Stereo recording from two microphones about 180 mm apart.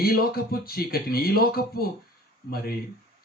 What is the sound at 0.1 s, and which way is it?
Speech, 55° left (ahead or behind).